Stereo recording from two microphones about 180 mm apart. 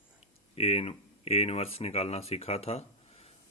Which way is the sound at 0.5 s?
35° left (ahead or behind).